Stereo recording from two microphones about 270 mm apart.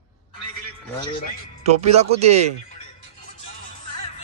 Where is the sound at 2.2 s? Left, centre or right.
Right.